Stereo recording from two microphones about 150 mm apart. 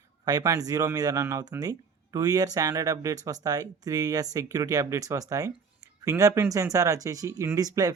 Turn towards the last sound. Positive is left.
turn(degrees=-25)  # may be behind; listen again after turning